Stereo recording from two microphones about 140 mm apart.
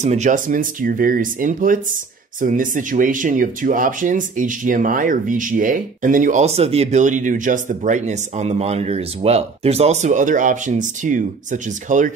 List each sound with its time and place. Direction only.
0.0 s speech: 55° right (ahead or behind)
6.4 s speech: 45° right (ahead or behind); by 12.1 s 65° right (ahead or behind)